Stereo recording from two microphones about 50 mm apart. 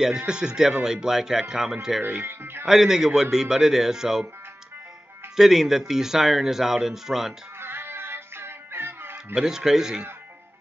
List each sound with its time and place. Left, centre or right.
0.0 s speech: centre
2.0 s speech: right
2.6 s speech: centre
5.3 s speech: centre
7.6 s music: right
9.3 s speech: centre